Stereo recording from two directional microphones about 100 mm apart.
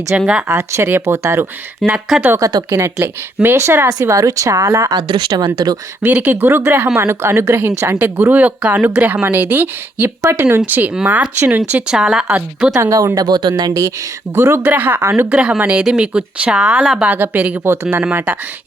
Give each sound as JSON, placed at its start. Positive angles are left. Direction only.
{"t": 0.2, "sound": "speech", "side_deg": -10}
{"t": 0.4, "sound": "speech", "side_deg": -25}
{"t": 1.8, "sound": "speech", "side_deg": 0}
{"t": 2.4, "sound": "speech", "side_deg": -40}
{"t": 2.7, "sound": "speech", "side_deg": -25}
{"t": 5.0, "sound": "speech", "side_deg": -50}
{"t": 6.0, "sound": "speech", "side_deg": -15}
{"t": 6.9, "sound": "speech", "side_deg": -25}
{"t": 12.7, "sound": "speech", "side_deg": -35}
{"t": 14.3, "sound": "speech", "side_deg": -25}
{"t": 15.0, "sound": "speech", "side_deg": -30}
{"t": 15.3, "sound": "speech", "side_deg": -10}
{"t": 17.0, "sound": "speech", "side_deg": -20}